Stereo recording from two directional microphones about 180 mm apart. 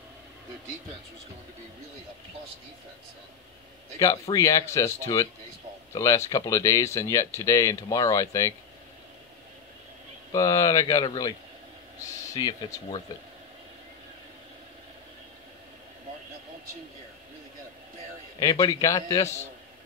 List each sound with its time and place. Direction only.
4.0 s speech: 20° left (ahead or behind)
10.3 s speech: 20° left (ahead or behind)
12.4 s speech: 20° left (ahead or behind)
18.4 s speech: 20° left (ahead or behind)